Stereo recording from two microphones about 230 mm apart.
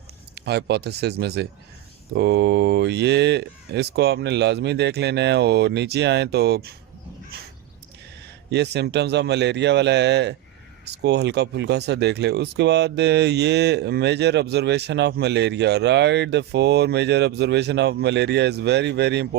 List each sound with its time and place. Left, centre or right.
0.3 s speech: right
8.4 s speech: right